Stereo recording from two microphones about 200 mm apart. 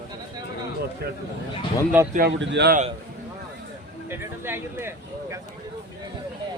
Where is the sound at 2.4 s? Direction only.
55° right (ahead or behind).